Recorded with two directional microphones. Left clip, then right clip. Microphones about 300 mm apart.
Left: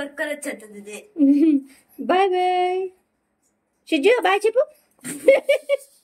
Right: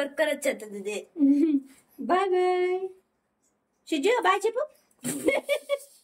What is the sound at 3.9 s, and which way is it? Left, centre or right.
A woman's voice, centre.